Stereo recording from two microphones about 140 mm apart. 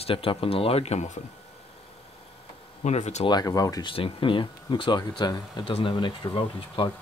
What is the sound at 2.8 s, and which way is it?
Speech, 55° left (ahead or behind).